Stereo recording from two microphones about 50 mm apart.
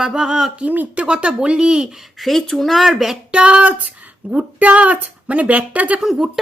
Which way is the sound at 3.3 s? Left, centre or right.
Right.